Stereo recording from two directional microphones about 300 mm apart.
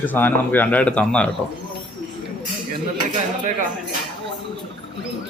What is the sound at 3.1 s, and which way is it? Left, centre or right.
Speech, right.